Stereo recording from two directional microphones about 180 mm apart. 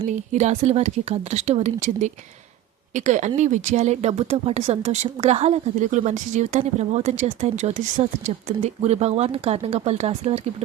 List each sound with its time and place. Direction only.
0.1 s speech: 40° right (ahead or behind)